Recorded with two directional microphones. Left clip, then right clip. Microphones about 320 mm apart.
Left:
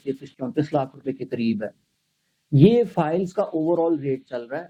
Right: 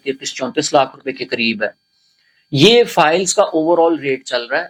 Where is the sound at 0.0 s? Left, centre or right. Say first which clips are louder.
Right 9 dB; centre.